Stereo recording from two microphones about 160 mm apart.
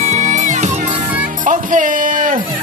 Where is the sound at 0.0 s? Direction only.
45° right (ahead or behind).